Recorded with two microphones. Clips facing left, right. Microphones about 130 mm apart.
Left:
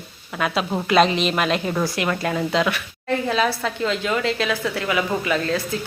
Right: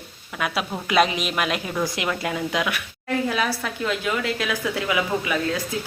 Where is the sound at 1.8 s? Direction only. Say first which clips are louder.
Left 3 dB; 20° right (ahead or behind).